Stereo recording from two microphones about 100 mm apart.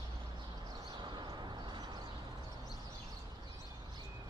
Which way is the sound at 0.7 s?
45° right (ahead or behind).